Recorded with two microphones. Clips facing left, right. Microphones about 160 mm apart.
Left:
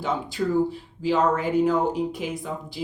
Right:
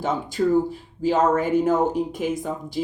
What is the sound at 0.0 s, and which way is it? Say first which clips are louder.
Speech: right 3 dB; 45° right (ahead or behind).